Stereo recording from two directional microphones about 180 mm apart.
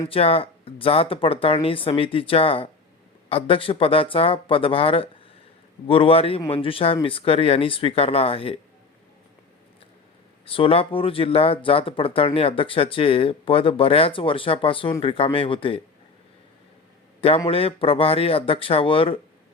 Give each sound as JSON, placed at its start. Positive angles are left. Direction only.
{"t": 0.0, "sound": "speech", "side_deg": 30}
{"t": 10.4, "sound": "speech", "side_deg": 30}
{"t": 17.2, "sound": "speech", "side_deg": 30}